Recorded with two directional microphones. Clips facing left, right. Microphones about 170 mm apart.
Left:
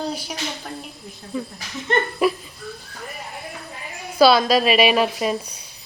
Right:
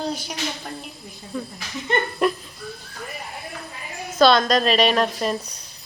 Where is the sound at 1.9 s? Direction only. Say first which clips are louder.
Left 2 dB; 5° left (ahead or behind).